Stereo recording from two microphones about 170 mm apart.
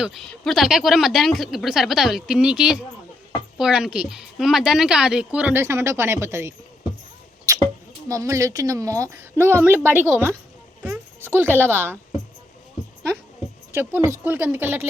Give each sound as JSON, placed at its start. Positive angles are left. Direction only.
{"t": 0.0, "sound": "speech", "side_deg": 0}
{"t": 7.5, "sound": "a sound", "side_deg": -20}
{"t": 8.0, "sound": "speech", "side_deg": -20}
{"t": 13.7, "sound": "speech", "side_deg": -15}